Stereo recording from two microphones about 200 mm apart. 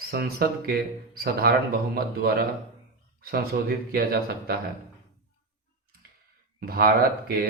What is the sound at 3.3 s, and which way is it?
A man's voice, 50° right (ahead or behind).